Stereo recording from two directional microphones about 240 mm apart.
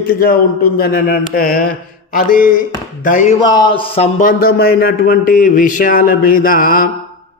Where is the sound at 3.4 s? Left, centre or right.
Centre.